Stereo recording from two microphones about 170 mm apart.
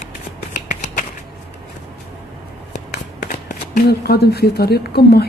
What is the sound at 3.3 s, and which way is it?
Speech, 55° left (ahead or behind).